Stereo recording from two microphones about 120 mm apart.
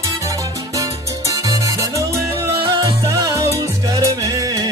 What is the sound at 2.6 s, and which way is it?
Music, 30° right (ahead or behind).